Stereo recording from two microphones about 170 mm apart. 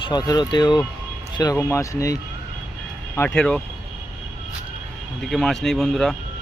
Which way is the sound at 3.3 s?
5° left (ahead or behind).